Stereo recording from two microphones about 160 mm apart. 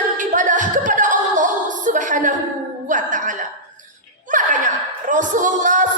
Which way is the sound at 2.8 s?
55° right (ahead or behind).